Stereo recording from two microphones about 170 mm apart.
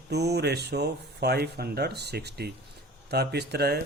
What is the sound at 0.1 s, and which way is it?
Speech, 75° right (ahead or behind).